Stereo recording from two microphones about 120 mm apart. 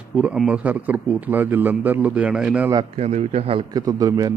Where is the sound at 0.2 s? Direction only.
10° right (ahead or behind).